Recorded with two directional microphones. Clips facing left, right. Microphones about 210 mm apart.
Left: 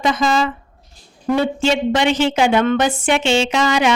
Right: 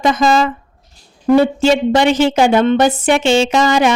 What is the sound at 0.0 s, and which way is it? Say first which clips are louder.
Speech: right 4 dB; 45° right (ahead or behind).